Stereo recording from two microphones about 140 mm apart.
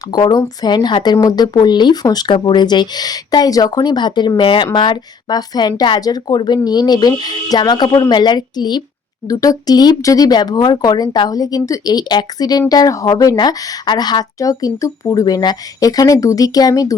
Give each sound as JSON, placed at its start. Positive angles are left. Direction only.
{"t": 0.1, "sound": "speech", "side_deg": 30}